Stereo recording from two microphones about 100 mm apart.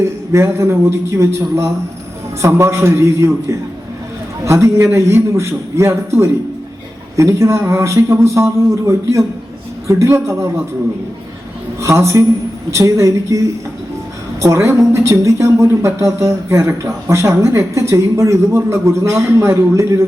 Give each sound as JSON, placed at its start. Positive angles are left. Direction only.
{"t": 0.0, "sound": "speech", "side_deg": -25}
{"t": 4.4, "sound": "speech", "side_deg": -30}
{"t": 7.2, "sound": "a woman's voice", "side_deg": -30}
{"t": 11.8, "sound": "a woman's voice", "side_deg": -30}
{"t": 14.4, "sound": "speech", "side_deg": -25}